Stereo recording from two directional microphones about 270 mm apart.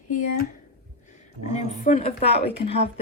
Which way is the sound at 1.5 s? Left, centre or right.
Left.